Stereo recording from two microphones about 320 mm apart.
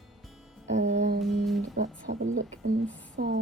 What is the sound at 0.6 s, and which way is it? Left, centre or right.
Speech, right.